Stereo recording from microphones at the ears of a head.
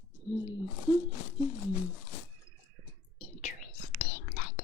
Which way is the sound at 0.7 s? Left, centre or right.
Left.